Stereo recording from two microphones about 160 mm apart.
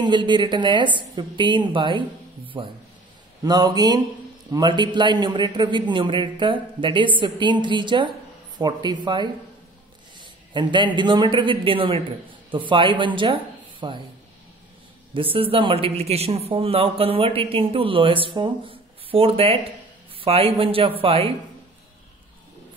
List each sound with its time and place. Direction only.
0.0 s a man's voice: 30° right (ahead or behind)
15.1 s a man's voice: 35° right (ahead or behind)